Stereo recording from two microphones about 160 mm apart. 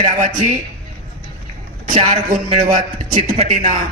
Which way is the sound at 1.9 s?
45° right (ahead or behind).